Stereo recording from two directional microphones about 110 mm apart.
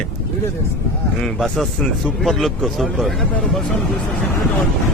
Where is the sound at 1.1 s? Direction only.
5° left (ahead or behind).